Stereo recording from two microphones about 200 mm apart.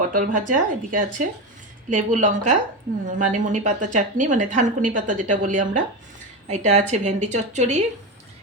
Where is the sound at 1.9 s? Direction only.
40° right (ahead or behind).